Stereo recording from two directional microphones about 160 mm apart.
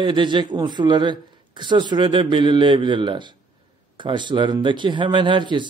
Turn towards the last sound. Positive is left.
turn(degrees=-30)  # may be behind; listen again after turning